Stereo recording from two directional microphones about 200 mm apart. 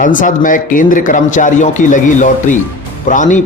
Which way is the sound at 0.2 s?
40° left (ahead or behind).